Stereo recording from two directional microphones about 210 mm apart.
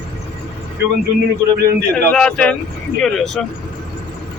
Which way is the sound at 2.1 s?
5° left (ahead or behind).